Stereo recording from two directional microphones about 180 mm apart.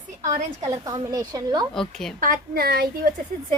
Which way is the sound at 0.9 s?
20° right (ahead or behind).